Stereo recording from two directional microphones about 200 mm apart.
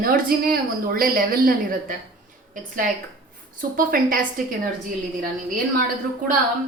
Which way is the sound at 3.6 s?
45° right (ahead or behind).